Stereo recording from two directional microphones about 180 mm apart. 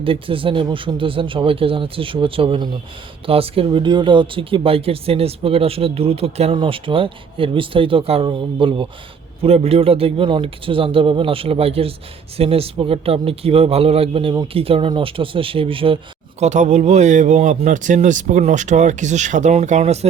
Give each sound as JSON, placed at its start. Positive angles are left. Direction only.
{"t": 0.0, "sound": "speech", "side_deg": -30}
{"t": 16.4, "sound": "speech", "side_deg": -40}